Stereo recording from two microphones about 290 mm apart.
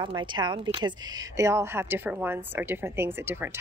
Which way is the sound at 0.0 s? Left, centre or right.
Centre.